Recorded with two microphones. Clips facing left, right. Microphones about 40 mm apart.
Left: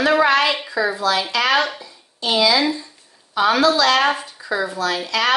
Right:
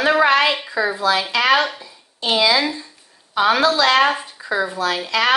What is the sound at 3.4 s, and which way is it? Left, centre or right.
Speech, right.